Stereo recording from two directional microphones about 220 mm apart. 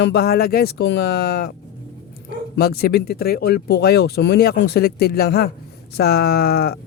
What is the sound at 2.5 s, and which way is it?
Speech, 45° left (ahead or behind).